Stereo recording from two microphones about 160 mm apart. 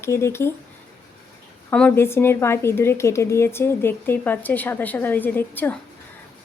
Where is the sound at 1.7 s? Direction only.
10° left (ahead or behind).